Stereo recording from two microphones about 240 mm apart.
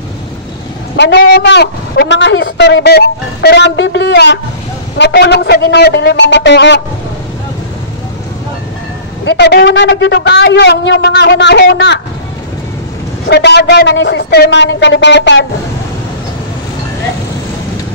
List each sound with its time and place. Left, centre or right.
0.9 s a man's voice: left
9.2 s a man's voice: left
13.3 s a man's voice: left